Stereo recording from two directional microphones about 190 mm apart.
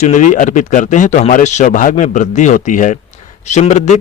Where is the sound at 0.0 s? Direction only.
40° left (ahead or behind).